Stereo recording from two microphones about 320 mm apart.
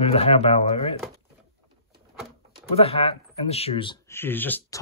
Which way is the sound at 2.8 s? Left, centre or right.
Centre.